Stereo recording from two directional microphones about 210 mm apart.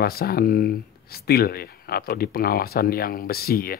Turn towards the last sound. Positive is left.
turn(degrees=45)  # may be behind; listen again after turning